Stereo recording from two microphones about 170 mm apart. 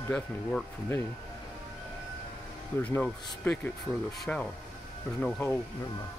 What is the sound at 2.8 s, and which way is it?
Speech, 10° left (ahead or behind).